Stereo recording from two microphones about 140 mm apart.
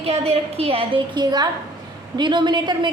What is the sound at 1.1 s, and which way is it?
A woman's voice, 30° right (ahead or behind).